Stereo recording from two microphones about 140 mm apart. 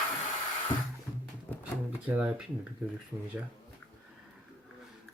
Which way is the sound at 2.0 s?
10° right (ahead or behind).